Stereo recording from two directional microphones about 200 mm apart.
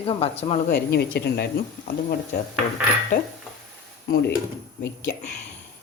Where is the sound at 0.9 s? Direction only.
55° left (ahead or behind).